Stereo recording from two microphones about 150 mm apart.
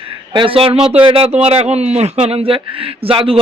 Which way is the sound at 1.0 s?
40° right (ahead or behind).